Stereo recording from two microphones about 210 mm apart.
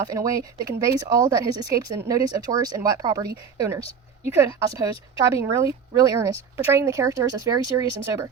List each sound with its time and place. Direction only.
0.1 s speech: 15° right (ahead or behind)